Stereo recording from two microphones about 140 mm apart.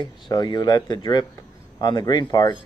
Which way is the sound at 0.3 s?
30° left (ahead or behind).